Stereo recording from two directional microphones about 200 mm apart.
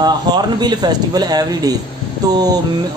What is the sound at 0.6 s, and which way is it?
Speech, 20° right (ahead or behind).